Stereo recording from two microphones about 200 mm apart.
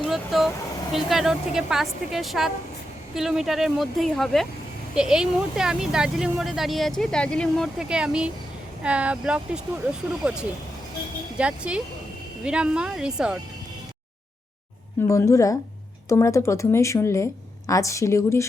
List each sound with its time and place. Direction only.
0.0 s vehicle: centre (ahead or behind)
0.9 s speech: centre (ahead or behind)
15.1 s speech: 15° left (ahead or behind)